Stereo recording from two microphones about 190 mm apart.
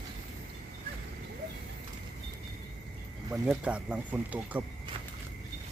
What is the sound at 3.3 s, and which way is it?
Speech, 5° right (ahead or behind).